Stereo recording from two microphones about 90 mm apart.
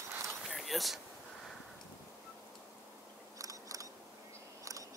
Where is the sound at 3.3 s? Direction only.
40° right (ahead or behind).